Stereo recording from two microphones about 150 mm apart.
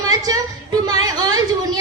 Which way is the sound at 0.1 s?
25° right (ahead or behind).